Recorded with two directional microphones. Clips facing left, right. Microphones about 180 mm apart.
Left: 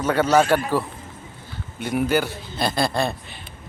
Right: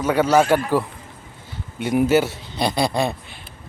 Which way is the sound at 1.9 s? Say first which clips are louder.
Right 4 dB; 25° right (ahead or behind).